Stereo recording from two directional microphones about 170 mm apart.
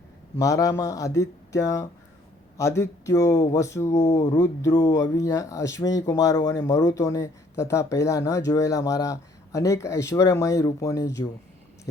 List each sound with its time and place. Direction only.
0.3 s speech: 20° left (ahead or behind)